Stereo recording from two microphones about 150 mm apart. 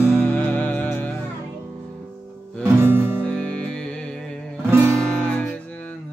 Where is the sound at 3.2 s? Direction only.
5° left (ahead or behind).